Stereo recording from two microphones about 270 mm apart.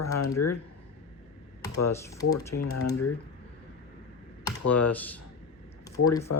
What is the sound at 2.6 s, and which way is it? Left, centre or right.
Speech, left.